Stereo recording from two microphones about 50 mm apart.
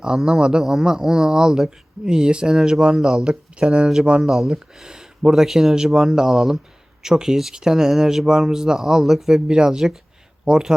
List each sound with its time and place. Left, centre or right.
0.3 s speech: centre
4.2 s speech: centre